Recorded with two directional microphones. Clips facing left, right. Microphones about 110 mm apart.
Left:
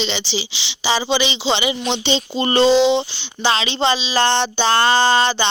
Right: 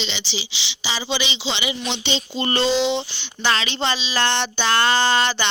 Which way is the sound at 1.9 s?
30° left (ahead or behind).